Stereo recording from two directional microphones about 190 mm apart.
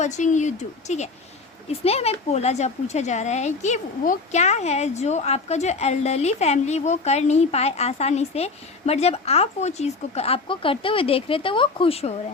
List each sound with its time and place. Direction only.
0.0 s speech: 40° left (ahead or behind)